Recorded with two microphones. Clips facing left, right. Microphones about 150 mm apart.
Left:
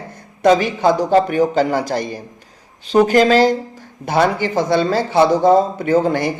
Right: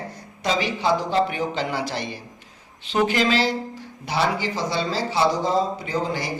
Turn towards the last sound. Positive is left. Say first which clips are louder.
# left 10 dB
turn(degrees=55)  # may be behind; listen again after turning